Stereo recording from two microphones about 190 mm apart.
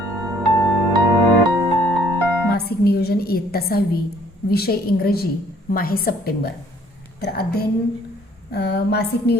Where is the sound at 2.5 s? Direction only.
55° left (ahead or behind).